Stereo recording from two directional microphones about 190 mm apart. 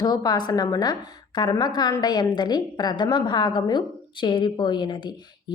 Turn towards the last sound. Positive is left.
turn(degrees=25)  # may be behind; listen again after turning